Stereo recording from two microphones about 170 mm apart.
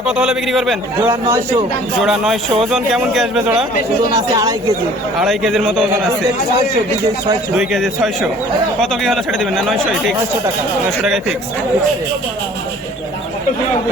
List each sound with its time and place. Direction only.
0.0 s speech: 5° right (ahead or behind)
1.0 s speech: 15° right (ahead or behind)
2.0 s speech: centre (ahead or behind)
4.1 s speech: 20° right (ahead or behind)
5.2 s speech: centre (ahead or behind)
7.5 s speech: centre (ahead or behind)